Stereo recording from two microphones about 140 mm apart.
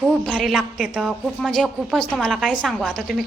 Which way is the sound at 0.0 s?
Centre (ahead or behind).